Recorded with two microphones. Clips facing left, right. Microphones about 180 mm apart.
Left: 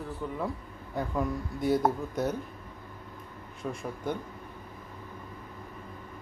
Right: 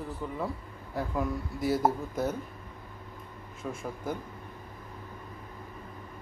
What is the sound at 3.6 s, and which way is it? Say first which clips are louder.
Speech: left 1 dB; centre (ahead or behind).